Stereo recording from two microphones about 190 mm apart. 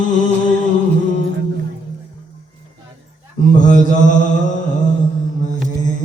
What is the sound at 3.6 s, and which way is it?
Mantra, 40° left (ahead or behind).